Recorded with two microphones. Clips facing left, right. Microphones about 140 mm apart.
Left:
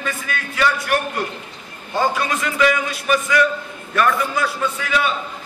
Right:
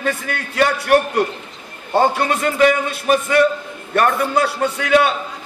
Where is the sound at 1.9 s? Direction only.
60° right (ahead or behind); by 3.2 s 40° right (ahead or behind).